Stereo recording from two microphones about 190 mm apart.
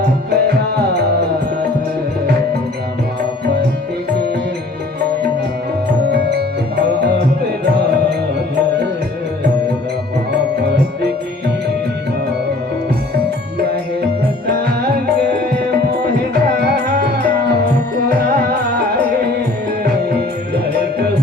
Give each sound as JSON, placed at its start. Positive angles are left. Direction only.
{"t": 0.0, "sound": "music", "side_deg": -60}
{"t": 6.1, "sound": "music", "side_deg": -60}
{"t": 14.4, "sound": "music", "side_deg": -60}
{"t": 16.3, "sound": "music", "side_deg": -60}
{"t": 18.8, "sound": "music", "side_deg": -60}